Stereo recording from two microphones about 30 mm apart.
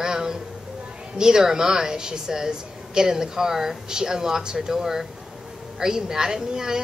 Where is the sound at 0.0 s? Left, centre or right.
Centre.